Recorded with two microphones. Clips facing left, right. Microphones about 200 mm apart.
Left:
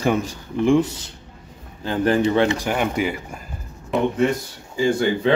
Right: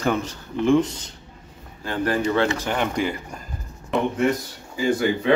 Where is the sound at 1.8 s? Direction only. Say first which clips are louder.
Left 4 dB; 25° left (ahead or behind); by 3.4 s 5° left (ahead or behind).